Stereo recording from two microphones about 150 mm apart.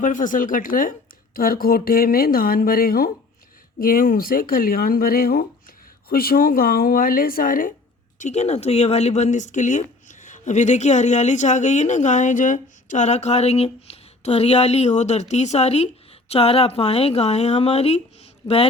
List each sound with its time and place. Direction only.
0.0 s speech: 60° left (ahead or behind)
8.2 s a man's voice: 50° left (ahead or behind)